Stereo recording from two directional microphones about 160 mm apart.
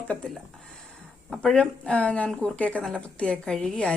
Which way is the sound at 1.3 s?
Centre (ahead or behind).